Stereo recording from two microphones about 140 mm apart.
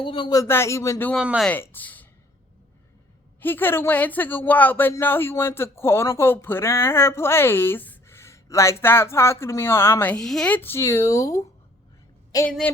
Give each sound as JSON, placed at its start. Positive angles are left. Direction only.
{"t": 0.0, "sound": "speech", "side_deg": 35}
{"t": 0.4, "sound": "speech", "side_deg": 20}
{"t": 1.1, "sound": "speech", "side_deg": -5}
{"t": 1.5, "sound": "speech", "side_deg": 15}
{"t": 3.4, "sound": "speech", "side_deg": 15}
{"t": 12.5, "sound": "speech", "side_deg": 5}